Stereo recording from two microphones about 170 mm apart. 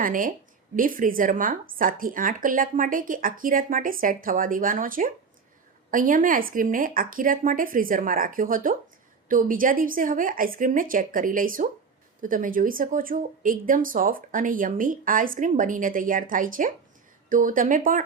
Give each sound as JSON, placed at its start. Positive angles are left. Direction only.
{"t": 0.0, "sound": "speech", "side_deg": -55}